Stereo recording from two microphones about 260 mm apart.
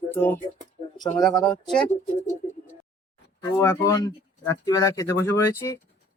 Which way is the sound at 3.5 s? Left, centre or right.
Centre.